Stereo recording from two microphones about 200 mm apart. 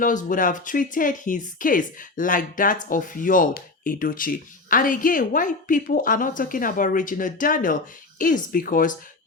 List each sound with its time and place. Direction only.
0.0 s speech: 40° left (ahead or behind)